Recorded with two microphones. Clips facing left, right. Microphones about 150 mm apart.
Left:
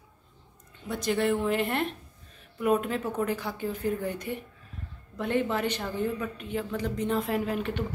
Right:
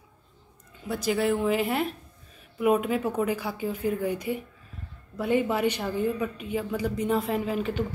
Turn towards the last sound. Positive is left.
turn(degrees=0)  # may be behind; listen again after turning